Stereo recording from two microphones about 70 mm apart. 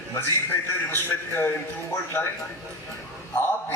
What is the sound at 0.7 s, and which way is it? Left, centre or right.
Speech, left.